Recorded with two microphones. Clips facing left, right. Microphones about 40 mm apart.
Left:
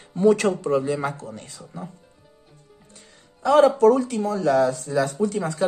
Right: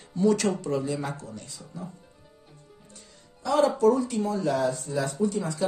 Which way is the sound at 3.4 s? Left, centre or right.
Left.